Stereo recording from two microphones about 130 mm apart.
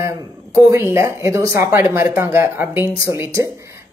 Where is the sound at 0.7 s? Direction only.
20° right (ahead or behind).